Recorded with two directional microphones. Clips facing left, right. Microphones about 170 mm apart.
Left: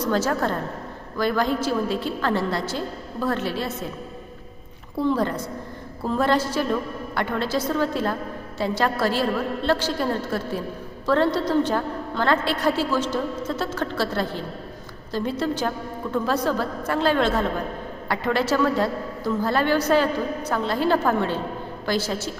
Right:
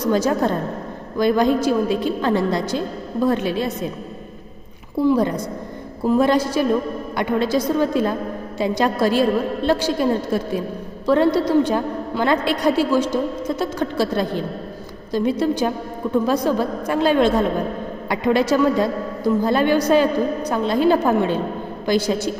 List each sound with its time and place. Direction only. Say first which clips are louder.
0.0 s a woman's voice: right 4 dB; 15° right (ahead or behind)
5.0 s a woman's voice: right 5 dB; 15° right (ahead or behind)